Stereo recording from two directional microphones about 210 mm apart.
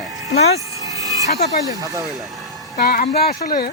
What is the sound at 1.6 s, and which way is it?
Speech, 15° right (ahead or behind).